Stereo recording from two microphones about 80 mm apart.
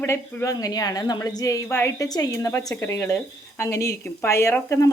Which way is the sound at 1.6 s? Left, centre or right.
Left.